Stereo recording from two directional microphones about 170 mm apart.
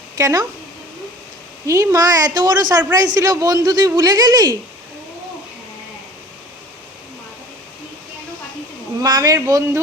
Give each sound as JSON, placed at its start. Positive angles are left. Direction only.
{"t": 0.2, "sound": "a woman's voice", "side_deg": -20}
{"t": 1.6, "sound": "a woman's voice", "side_deg": -20}
{"t": 9.0, "sound": "a woman's voice", "side_deg": -20}